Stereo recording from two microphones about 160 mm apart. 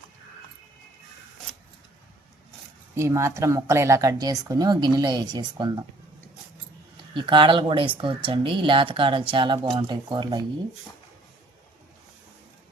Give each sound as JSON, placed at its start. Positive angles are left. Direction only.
{"t": 2.9, "sound": "speech", "side_deg": -20}
{"t": 6.9, "sound": "speech", "side_deg": -30}